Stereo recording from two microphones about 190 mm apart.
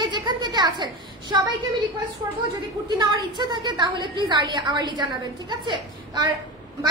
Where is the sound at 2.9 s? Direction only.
25° right (ahead or behind).